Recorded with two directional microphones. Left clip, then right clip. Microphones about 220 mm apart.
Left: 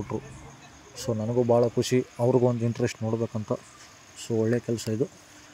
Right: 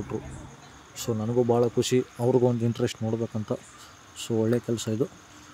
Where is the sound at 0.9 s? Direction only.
10° left (ahead or behind).